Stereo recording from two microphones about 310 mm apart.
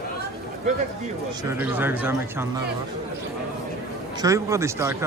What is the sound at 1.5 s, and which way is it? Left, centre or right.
Speech, centre.